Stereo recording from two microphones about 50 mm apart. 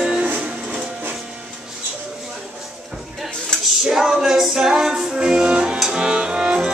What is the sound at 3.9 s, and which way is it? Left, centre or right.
Music, centre.